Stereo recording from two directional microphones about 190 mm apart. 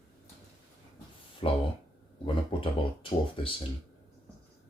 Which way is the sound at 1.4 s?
30° left (ahead or behind).